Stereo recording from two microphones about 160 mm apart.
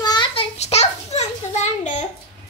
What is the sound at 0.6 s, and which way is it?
A child's voice, 45° left (ahead or behind).